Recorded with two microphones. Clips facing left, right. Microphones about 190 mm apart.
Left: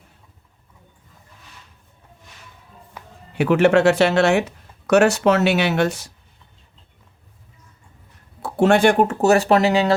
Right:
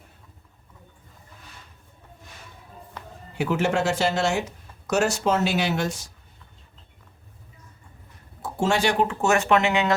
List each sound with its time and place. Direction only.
3.0 s a sound: 10° left (ahead or behind)
3.3 s speech: 65° left (ahead or behind)
8.4 s speech: 65° left (ahead or behind); by 9.9 s 35° left (ahead or behind)